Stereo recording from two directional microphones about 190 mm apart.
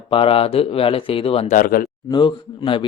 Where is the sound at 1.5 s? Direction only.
50° left (ahead or behind).